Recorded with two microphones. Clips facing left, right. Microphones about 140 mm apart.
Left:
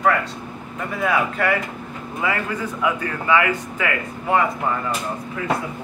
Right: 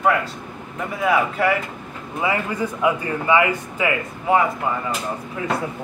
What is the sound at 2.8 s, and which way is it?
Speech, 25° right (ahead or behind).